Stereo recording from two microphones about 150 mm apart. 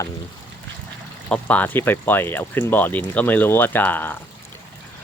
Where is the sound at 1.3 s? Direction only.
10° left (ahead or behind).